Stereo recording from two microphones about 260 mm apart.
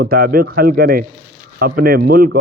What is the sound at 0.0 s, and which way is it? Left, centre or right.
Speech, right.